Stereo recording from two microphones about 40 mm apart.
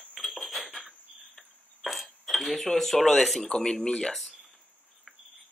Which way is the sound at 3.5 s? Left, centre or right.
Centre.